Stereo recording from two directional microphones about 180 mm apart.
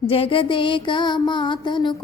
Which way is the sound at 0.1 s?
30° left (ahead or behind).